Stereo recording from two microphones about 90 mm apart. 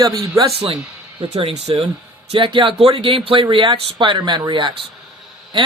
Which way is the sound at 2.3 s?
65° right (ahead or behind).